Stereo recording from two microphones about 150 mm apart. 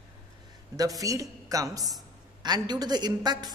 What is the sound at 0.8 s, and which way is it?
A man's voice, 25° right (ahead or behind).